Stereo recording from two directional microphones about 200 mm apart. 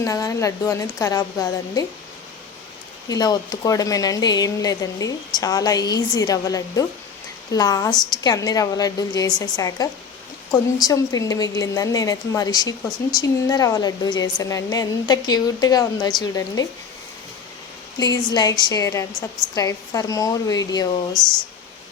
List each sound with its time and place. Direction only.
0.0 s a woman's voice: 15° left (ahead or behind)
3.1 s a woman's voice: 20° left (ahead or behind)
17.9 s a woman's voice: 20° left (ahead or behind)